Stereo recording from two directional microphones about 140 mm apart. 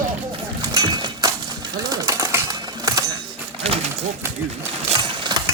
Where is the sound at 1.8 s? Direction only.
25° right (ahead or behind).